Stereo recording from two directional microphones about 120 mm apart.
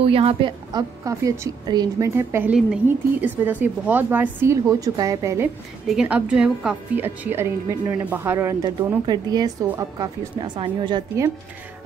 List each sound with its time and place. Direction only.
0.0 s a woman's voice: 55° right (ahead or behind)
1.0 s speech: 25° right (ahead or behind)
1.7 s speech: 35° right (ahead or behind)
2.0 s speech: 20° right (ahead or behind)
5.9 s speech: 5° right (ahead or behind)
7.0 s speech: 20° right (ahead or behind)
9.0 s speech: 35° right (ahead or behind)